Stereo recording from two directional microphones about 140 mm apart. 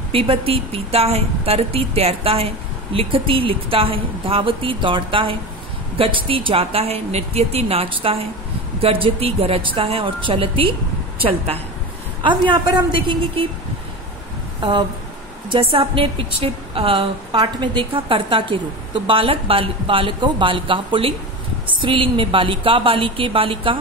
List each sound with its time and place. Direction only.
0.1 s a woman's voice: 40° right (ahead or behind)
14.6 s a woman's voice: 35° right (ahead or behind)